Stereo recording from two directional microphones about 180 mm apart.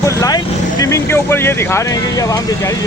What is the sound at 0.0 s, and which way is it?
Speech, 15° left (ahead or behind).